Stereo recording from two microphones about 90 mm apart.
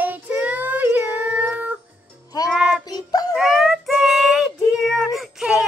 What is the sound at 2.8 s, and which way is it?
Music, 45° left (ahead or behind).